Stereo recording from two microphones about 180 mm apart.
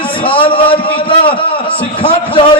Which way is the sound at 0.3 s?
30° left (ahead or behind).